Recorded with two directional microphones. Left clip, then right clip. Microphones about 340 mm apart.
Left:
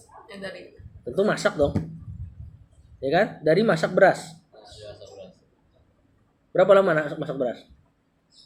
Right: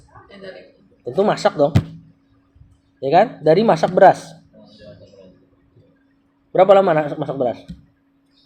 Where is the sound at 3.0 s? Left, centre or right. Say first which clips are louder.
Right 7 dB; right.